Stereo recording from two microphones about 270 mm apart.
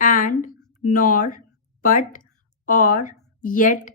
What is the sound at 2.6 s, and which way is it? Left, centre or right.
A woman's voice, left.